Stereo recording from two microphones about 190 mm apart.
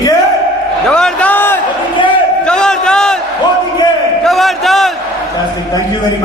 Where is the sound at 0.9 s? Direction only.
5° left (ahead or behind).